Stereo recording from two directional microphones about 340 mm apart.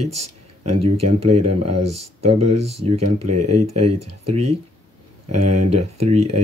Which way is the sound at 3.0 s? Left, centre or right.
Right.